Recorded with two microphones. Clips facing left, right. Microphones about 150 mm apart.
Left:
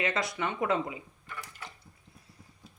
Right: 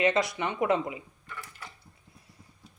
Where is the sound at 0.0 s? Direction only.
20° right (ahead or behind).